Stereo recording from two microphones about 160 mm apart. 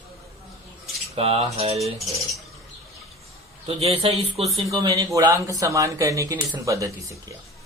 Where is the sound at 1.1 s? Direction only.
40° right (ahead or behind).